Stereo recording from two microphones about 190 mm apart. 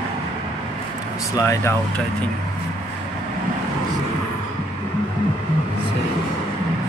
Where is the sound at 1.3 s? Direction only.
15° left (ahead or behind).